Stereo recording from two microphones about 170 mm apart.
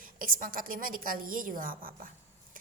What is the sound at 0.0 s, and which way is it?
A woman's voice, 55° right (ahead or behind).